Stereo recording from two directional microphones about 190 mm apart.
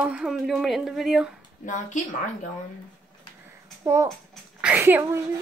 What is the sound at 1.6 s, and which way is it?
Speech, 40° left (ahead or behind).